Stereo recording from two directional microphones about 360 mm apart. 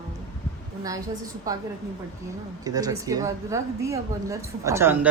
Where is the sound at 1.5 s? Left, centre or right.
Centre.